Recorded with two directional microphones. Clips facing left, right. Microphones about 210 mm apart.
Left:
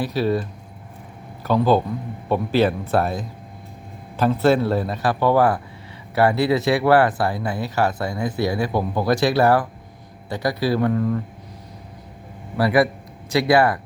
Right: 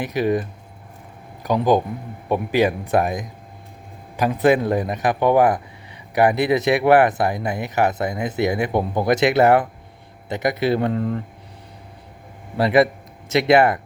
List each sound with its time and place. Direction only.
0.0 s a man's voice: 15° right (ahead or behind)
1.5 s a man's voice: 15° right (ahead or behind)
12.5 s a man's voice: 20° right (ahead or behind)